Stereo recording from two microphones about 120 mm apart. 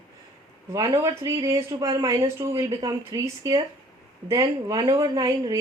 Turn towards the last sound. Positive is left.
turn(degrees=-30)  # may be behind; listen again after turning